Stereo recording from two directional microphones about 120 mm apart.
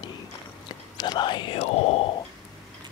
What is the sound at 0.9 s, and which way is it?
Whispering, 35° left (ahead or behind).